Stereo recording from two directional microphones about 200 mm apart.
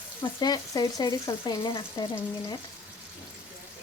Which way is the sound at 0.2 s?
20° left (ahead or behind).